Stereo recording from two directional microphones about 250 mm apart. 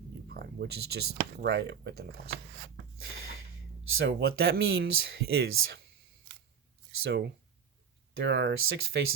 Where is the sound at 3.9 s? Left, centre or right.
Right.